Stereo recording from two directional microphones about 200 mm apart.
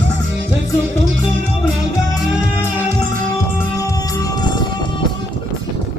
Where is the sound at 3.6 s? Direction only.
15° left (ahead or behind).